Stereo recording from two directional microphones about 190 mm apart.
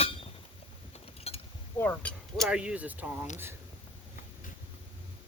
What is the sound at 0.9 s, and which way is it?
Mechanisms, 30° left (ahead or behind).